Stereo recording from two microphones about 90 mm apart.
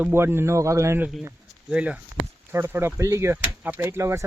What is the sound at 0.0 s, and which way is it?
Speech, 25° right (ahead or behind).